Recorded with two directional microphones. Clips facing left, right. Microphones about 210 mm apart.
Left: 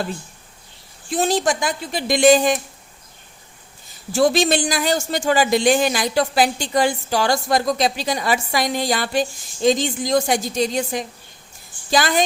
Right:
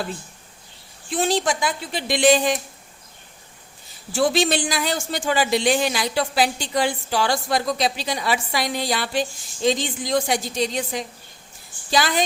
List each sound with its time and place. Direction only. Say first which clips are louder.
1.1 s speech: left 2 dB; 40° left (ahead or behind)
4.1 s speech: left 3 dB; 45° left (ahead or behind)